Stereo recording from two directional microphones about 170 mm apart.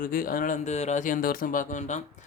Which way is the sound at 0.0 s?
60° left (ahead or behind).